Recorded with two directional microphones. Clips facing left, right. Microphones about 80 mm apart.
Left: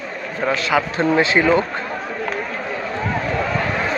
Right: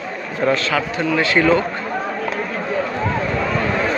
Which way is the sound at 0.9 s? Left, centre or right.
Left.